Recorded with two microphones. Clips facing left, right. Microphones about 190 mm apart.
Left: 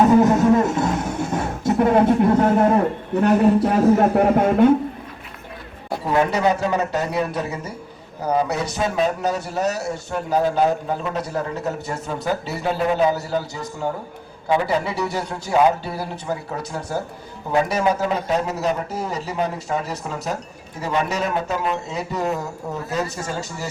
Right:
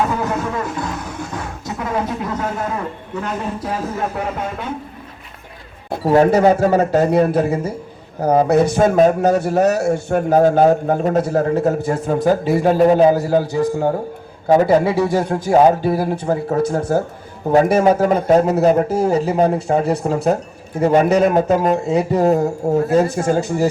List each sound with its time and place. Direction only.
0.5 s a sound: 25° left (ahead or behind)
1.6 s a sound: 55° left (ahead or behind)
2.6 s speech: 55° left (ahead or behind)
6.1 s a man's voice: 45° right (ahead or behind)
19.1 s speech: 30° right (ahead or behind)
20.0 s a man's voice: 45° right (ahead or behind)